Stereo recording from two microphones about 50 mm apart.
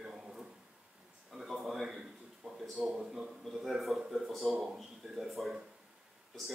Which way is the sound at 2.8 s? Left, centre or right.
Centre.